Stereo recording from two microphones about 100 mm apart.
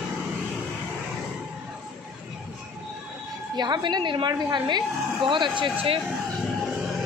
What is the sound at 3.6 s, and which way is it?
A woman's voice, 45° right (ahead or behind).